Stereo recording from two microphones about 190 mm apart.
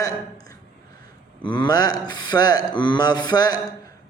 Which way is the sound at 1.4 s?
25° left (ahead or behind).